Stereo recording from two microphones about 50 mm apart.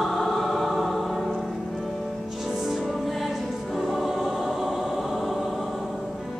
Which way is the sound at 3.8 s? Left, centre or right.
Centre.